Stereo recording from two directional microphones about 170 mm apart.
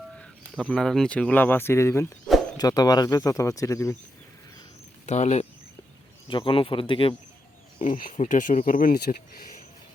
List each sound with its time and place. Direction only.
0.5 s speech: centre (ahead or behind); by 3.9 s 20° left (ahead or behind)
5.0 s speech: 40° left (ahead or behind)
6.2 s speech: 30° left (ahead or behind)
7.8 s speech: 50° left (ahead or behind)